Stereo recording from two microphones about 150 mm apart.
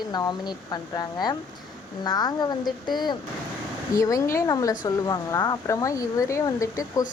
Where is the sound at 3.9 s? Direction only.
20° left (ahead or behind).